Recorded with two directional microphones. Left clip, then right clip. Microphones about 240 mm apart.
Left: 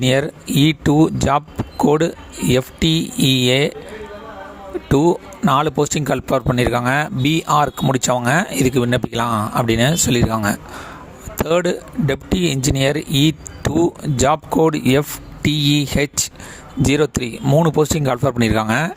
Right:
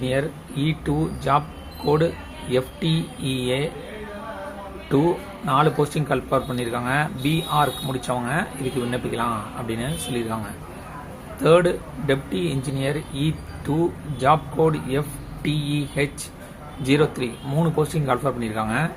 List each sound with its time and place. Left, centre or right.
0.0 s speech: left
4.9 s speech: left